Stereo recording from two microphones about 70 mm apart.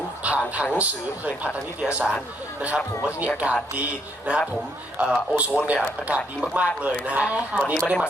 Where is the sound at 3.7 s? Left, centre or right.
Centre.